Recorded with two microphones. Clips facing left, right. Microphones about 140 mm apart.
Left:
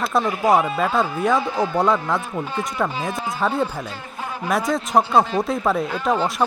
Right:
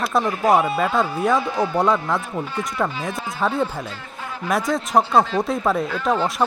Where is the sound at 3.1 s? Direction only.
20° left (ahead or behind).